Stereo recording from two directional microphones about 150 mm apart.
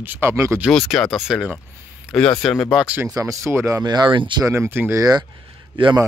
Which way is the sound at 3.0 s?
25° right (ahead or behind).